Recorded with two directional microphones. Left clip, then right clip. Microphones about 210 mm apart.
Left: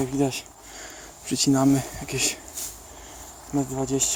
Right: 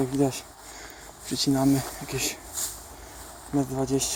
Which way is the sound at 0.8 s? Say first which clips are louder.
Left 5 dB; 20° left (ahead or behind).